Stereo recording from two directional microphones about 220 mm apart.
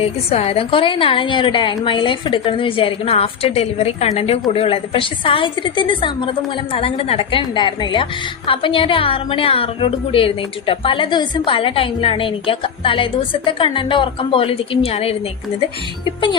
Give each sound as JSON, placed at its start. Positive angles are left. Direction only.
{"t": 0.0, "sound": "a woman's voice", "side_deg": 25}